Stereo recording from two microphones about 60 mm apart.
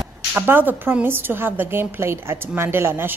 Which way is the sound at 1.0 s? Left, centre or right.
Right.